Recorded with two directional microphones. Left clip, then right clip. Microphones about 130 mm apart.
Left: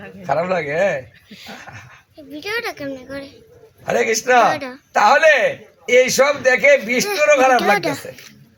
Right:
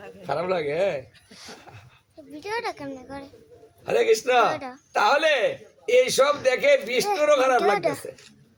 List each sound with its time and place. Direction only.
0.0 s a man's voice: 15° right (ahead or behind)
1.3 s speech: 40° right (ahead or behind)
2.3 s speech: 20° right (ahead or behind)